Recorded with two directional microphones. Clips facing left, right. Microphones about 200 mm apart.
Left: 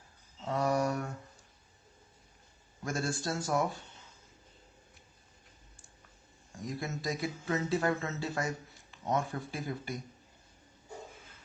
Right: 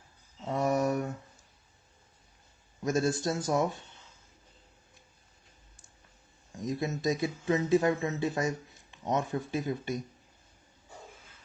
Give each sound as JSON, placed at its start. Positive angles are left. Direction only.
{"t": 0.5, "sound": "a sound", "side_deg": -20}
{"t": 2.8, "sound": "speech", "side_deg": -20}
{"t": 6.5, "sound": "speech", "side_deg": -20}